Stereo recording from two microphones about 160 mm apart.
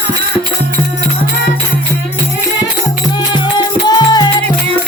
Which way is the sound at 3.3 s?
25° left (ahead or behind).